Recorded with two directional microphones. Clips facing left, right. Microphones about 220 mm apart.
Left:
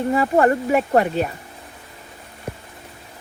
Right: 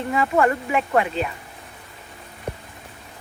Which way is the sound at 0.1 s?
35° left (ahead or behind).